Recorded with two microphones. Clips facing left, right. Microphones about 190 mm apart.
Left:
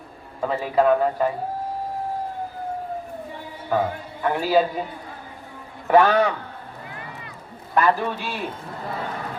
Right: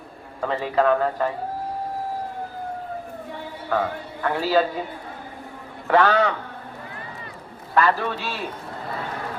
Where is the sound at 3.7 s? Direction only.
10° left (ahead or behind).